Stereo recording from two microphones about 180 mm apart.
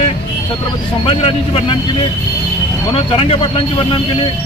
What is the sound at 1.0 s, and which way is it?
A man's voice, 30° left (ahead or behind).